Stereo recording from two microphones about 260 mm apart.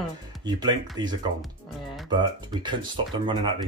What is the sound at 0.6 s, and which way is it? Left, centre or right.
Speech, centre.